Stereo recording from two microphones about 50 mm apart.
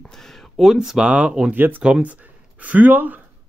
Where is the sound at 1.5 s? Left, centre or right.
Right.